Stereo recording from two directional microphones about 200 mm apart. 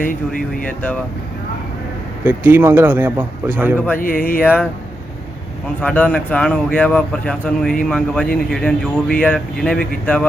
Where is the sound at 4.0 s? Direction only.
45° left (ahead or behind).